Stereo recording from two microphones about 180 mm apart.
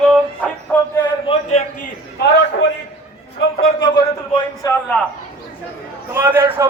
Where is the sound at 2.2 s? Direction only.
70° left (ahead or behind).